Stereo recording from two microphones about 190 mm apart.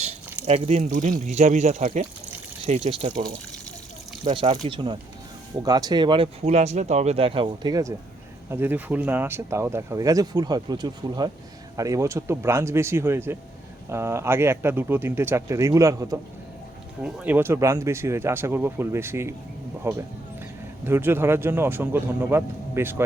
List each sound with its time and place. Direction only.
0.4 s speech: 35° right (ahead or behind)
4.6 s speech: 25° right (ahead or behind)